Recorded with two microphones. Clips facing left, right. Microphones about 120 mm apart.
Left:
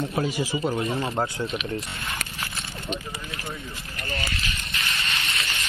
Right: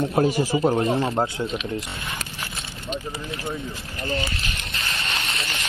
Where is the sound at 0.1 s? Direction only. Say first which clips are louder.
Right 6 dB; 35° right (ahead or behind).